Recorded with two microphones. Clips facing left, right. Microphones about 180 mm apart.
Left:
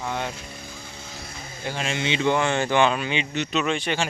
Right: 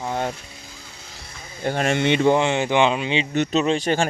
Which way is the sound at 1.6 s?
55° right (ahead or behind).